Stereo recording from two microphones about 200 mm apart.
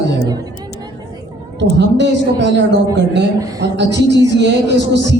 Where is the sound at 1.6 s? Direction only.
60° right (ahead or behind).